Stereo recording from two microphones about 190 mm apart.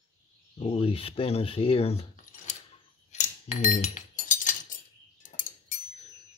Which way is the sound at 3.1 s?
40° left (ahead or behind).